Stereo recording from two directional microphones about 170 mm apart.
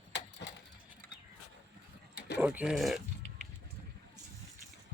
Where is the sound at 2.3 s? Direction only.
10° right (ahead or behind).